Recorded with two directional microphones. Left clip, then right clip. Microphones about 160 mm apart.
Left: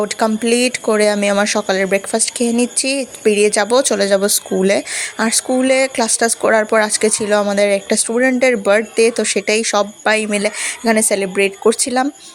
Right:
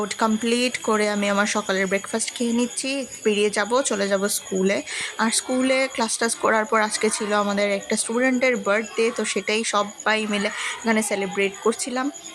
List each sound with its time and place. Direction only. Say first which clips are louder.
0.0 s speech: left 6 dB; 25° left (ahead or behind)